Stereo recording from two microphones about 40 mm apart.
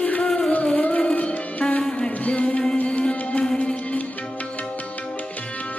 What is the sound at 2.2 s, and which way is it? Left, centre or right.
Music, left.